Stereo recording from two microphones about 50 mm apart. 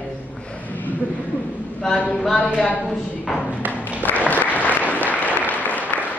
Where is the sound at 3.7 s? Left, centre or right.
Left.